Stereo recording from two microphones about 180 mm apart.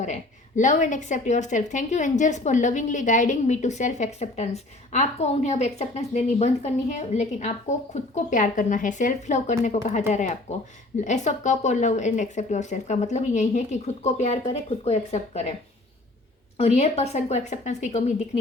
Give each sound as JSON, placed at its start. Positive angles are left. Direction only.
{"t": 0.0, "sound": "a woman's voice", "side_deg": 40}
{"t": 16.6, "sound": "a woman's voice", "side_deg": 35}